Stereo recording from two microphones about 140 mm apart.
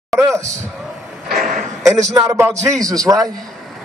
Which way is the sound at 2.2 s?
20° right (ahead or behind).